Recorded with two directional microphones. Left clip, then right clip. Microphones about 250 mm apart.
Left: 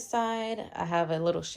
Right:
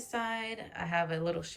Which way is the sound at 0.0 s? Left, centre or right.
Centre.